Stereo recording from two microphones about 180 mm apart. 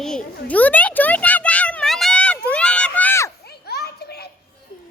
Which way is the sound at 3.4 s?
60° left (ahead or behind).